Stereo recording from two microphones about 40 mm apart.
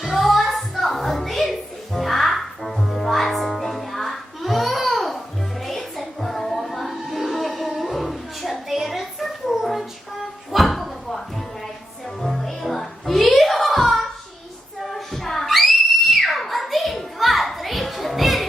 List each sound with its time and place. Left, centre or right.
0.0 s music: centre
14.8 s screaming: centre